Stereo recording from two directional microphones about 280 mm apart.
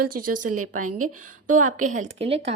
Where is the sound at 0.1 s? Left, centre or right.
Right.